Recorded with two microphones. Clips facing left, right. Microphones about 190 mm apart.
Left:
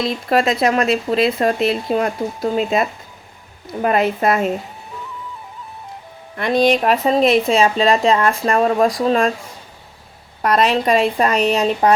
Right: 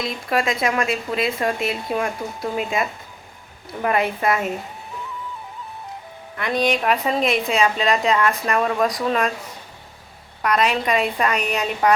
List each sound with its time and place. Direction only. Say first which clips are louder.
0.0 s speech: left 5 dB; 30° left (ahead or behind)
6.3 s speech: left 6 dB; 30° left (ahead or behind)
10.4 s speech: left 4 dB; 35° left (ahead or behind)